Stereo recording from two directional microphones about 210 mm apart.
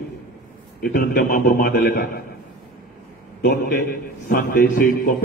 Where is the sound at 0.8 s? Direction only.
45° left (ahead or behind).